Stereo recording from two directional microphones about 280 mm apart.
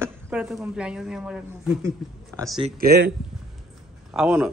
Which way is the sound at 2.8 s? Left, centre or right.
Right.